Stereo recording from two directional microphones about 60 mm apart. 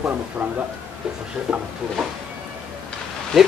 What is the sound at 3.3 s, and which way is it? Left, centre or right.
Speech, centre.